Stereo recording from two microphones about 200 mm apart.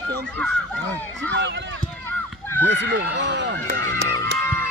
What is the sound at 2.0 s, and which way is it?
Run, 10° left (ahead or behind).